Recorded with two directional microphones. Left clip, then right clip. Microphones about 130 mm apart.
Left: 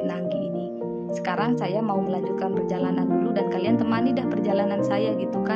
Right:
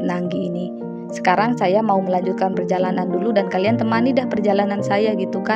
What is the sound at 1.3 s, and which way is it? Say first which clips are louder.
A woman's voice: right 10 dB; 50° right (ahead or behind).